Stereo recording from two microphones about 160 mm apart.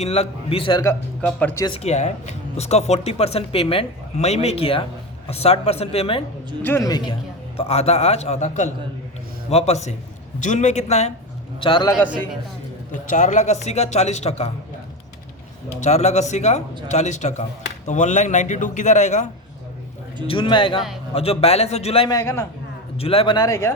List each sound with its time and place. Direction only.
0.0 s speech: 40° left (ahead or behind)
0.9 s speech: 10° left (ahead or behind)
1.6 s speech: 35° left (ahead or behind)
6.6 s a man's voice: 15° left (ahead or behind); by 11.1 s 45° left (ahead or behind)
11.6 s speech: 30° left (ahead or behind)
12.9 s a man's voice: 50° left (ahead or behind)
15.8 s a man's voice: 45° left (ahead or behind)
20.2 s speech: 30° left (ahead or behind)
22.1 s speech: 15° left (ahead or behind)
23.0 s speech: 35° left (ahead or behind); by 23.7 s 20° left (ahead or behind)